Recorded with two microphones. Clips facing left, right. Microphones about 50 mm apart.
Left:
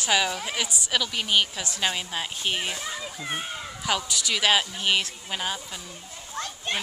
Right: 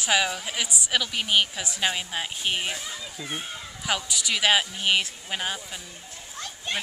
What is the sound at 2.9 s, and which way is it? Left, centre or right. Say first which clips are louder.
Speech: left 2 dB; left.